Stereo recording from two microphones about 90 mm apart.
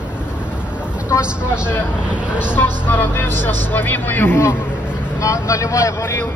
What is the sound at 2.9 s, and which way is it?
Speech, 20° left (ahead or behind).